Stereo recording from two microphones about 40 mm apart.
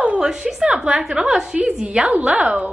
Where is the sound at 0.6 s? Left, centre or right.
Centre.